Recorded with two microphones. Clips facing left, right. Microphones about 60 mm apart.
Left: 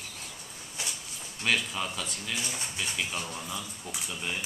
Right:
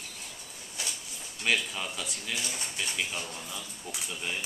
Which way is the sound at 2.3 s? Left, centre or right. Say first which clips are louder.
Even; centre.